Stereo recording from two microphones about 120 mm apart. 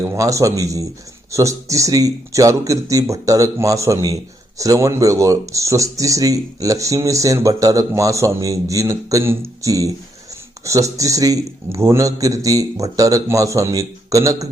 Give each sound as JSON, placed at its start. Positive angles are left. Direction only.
{"t": 0.0, "sound": "speech", "side_deg": -25}